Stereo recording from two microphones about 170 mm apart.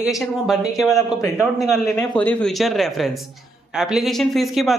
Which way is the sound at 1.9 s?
10° left (ahead or behind).